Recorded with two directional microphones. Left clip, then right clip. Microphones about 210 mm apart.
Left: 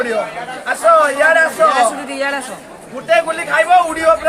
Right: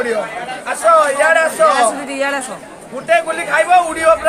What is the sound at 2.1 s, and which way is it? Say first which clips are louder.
A man's voice: right 1 dB; 20° right (ahead or behind).